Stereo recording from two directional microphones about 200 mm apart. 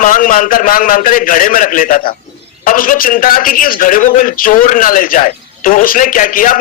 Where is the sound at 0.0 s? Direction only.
40° left (ahead or behind).